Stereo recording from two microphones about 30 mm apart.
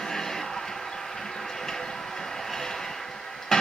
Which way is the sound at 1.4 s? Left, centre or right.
Centre.